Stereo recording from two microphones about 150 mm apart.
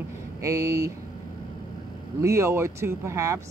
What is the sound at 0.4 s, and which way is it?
Speech, 20° right (ahead or behind).